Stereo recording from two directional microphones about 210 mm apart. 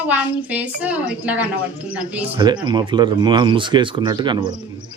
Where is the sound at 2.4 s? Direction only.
20° right (ahead or behind).